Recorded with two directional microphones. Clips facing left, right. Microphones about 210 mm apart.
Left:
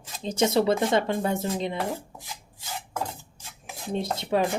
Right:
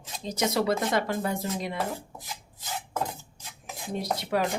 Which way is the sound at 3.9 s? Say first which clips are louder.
Left 3 dB; 25° left (ahead or behind).